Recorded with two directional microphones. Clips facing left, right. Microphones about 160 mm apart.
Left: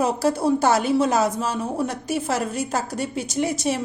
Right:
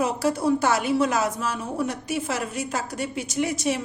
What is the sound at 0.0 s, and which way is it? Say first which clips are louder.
A woman's voice: left 2 dB; 30° left (ahead or behind).